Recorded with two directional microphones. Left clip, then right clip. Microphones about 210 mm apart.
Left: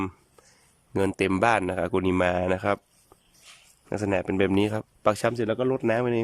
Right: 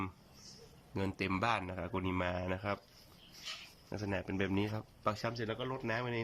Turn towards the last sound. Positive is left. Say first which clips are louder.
# left 14 dB
turn(degrees=60)  # may be behind; listen again after turning